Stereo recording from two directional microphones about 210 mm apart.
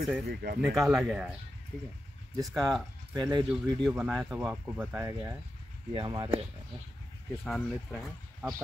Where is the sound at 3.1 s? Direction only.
20° right (ahead or behind).